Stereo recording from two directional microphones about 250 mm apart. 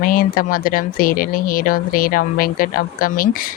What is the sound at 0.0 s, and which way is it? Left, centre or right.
Speech, left.